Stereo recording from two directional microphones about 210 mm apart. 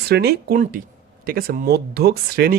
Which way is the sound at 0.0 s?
50° right (ahead or behind).